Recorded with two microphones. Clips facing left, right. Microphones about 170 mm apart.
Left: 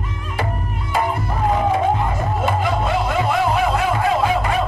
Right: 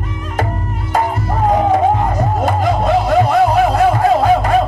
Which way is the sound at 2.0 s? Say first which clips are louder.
Right 5 dB; 40° right (ahead or behind).